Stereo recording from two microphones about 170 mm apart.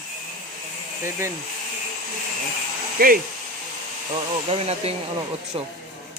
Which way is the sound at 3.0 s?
60° right (ahead or behind).